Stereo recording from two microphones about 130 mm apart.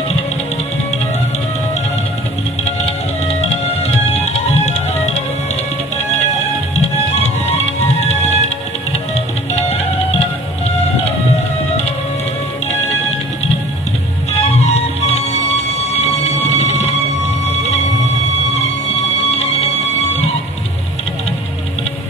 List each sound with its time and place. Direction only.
3.3 s music: 50° left (ahead or behind)
7.2 s music: 55° left (ahead or behind)
14.4 s music: 55° left (ahead or behind)
16.0 s a sound: 50° left (ahead or behind)
18.9 s music: 55° left (ahead or behind)